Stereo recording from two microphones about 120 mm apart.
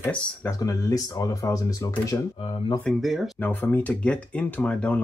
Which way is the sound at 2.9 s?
Centre (ahead or behind).